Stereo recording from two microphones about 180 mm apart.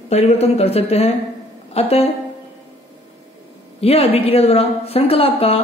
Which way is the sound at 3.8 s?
35° left (ahead or behind).